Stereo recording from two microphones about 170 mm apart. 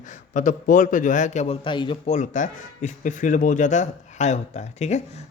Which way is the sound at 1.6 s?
30° left (ahead or behind).